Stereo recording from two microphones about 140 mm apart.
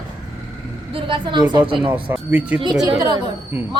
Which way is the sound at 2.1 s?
10° right (ahead or behind).